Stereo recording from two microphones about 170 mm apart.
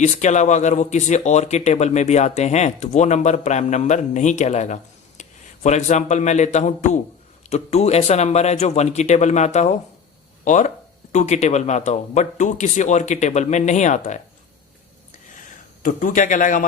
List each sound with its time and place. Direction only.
0.0 s speech: 45° left (ahead or behind)
15.8 s speech: 50° left (ahead or behind)